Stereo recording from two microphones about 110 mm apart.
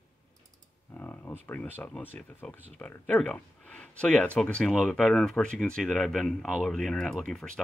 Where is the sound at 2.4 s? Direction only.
10° left (ahead or behind).